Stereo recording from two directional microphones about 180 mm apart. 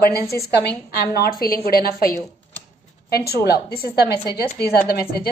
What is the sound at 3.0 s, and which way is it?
Speech, 60° left (ahead or behind).